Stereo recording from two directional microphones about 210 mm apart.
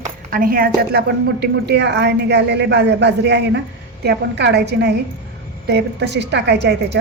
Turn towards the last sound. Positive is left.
turn(degrees=-55)  # may be behind; listen again after turning